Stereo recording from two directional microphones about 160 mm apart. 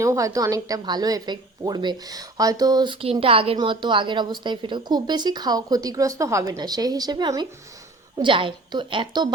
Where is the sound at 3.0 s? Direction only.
35° right (ahead or behind).